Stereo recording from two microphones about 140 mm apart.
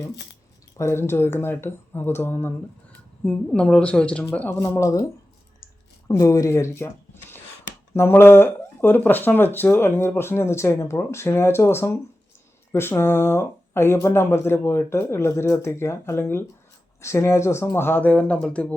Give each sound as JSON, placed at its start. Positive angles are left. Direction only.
{"t": 0.8, "sound": "speech", "side_deg": 15}
{"t": 6.1, "sound": "speech", "side_deg": 25}